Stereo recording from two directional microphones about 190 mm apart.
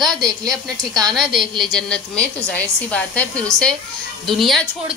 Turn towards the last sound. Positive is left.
turn(degrees=0)  # may be behind; listen again after turning